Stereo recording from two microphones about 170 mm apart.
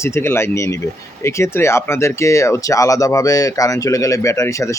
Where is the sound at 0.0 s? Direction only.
15° left (ahead or behind).